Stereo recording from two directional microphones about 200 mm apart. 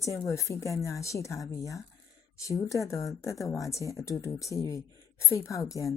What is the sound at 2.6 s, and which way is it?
Speech, 15° left (ahead or behind).